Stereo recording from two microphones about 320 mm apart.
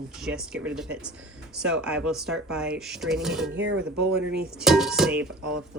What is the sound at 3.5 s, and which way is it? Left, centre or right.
Speech, right.